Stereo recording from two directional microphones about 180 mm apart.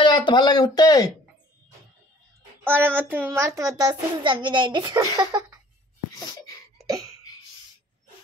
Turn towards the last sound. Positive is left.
turn(degrees=-20)  # may be behind; listen again after turning